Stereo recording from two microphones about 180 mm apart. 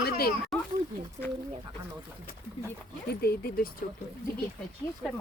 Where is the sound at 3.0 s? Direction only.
60° left (ahead or behind).